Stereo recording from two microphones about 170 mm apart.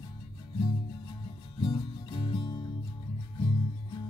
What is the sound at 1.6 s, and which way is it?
Music, 30° left (ahead or behind).